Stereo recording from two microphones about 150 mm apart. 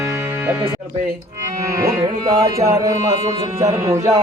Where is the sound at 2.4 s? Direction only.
20° right (ahead or behind).